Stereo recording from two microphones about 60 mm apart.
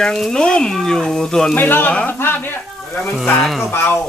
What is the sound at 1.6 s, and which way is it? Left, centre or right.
Speech, left.